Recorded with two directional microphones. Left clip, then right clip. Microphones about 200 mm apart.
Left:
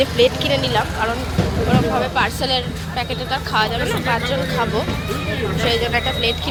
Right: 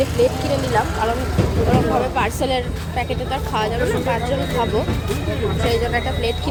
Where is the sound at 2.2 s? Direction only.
30° right (ahead or behind).